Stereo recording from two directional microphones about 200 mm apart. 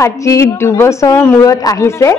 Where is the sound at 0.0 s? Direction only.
15° left (ahead or behind).